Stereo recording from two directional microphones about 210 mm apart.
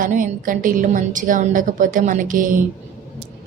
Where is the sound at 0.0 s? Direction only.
40° right (ahead or behind).